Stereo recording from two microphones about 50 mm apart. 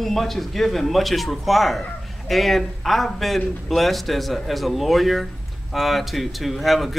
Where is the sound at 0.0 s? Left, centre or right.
Centre.